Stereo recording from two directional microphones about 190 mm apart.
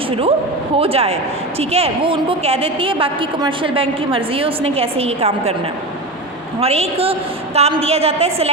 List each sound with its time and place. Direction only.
0.8 s speech: 30° right (ahead or behind)
6.6 s speech: 30° right (ahead or behind)